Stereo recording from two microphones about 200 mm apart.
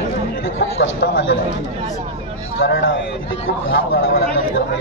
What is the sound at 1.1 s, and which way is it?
Speech, 75° left (ahead or behind).